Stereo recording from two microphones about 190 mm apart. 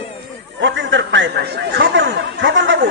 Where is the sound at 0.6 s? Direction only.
70° right (ahead or behind).